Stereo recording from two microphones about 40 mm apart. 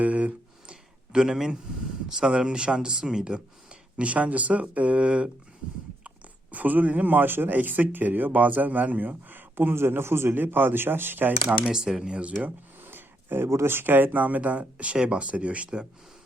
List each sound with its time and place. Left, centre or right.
0.0 s a sound: right
0.7 s a sound: right
2.0 s speech: centre
6.5 s speech: right
10.3 s speech: right
11.7 s speech: centre
12.8 s speech: right
14.9 s speech: right